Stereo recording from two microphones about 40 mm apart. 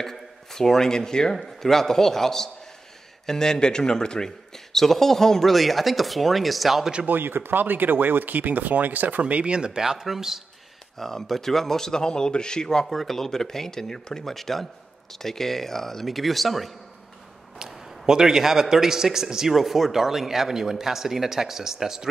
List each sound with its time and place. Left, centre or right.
0.0 s a man's voice: centre
4.7 s speech: centre
7.1 s speech: right
9.2 s speech: right
9.8 s a man's voice: centre
11.0 s a man's voice: centre
17.6 s a man's voice: centre